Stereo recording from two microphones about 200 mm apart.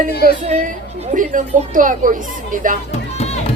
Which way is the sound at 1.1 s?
40° right (ahead or behind).